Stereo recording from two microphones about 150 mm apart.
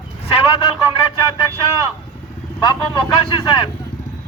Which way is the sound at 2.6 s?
30° left (ahead or behind).